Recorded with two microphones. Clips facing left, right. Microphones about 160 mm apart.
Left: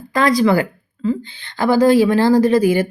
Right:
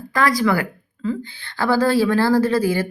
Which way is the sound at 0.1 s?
20° left (ahead or behind).